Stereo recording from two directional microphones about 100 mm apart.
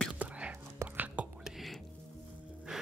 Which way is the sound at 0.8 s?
30° right (ahead or behind).